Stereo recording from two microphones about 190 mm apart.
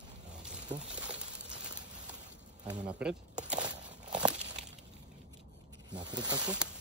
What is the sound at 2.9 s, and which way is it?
Speech, 5° right (ahead or behind).